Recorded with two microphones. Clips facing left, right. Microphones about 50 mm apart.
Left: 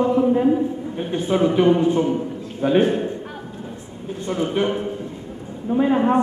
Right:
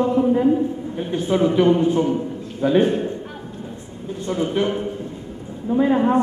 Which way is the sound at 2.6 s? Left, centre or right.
Left.